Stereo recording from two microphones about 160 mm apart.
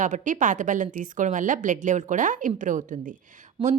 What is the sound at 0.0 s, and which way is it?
A woman's voice, 55° right (ahead or behind).